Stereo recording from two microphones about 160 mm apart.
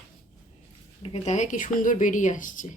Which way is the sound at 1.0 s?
40° left (ahead or behind).